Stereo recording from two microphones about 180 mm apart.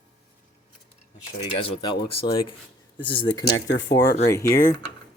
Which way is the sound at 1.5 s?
30° left (ahead or behind).